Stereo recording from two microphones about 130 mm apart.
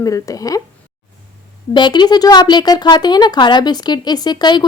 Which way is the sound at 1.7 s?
35° left (ahead or behind).